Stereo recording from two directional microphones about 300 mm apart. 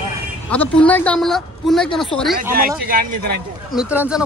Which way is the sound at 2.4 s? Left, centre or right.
Right.